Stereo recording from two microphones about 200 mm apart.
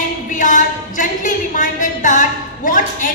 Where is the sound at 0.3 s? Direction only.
40° left (ahead or behind).